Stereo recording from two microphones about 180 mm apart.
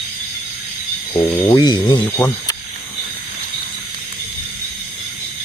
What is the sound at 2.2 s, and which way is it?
Speech, 15° left (ahead or behind).